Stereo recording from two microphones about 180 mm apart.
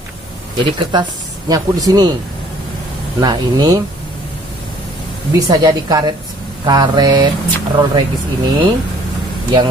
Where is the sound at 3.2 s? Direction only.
20° right (ahead or behind).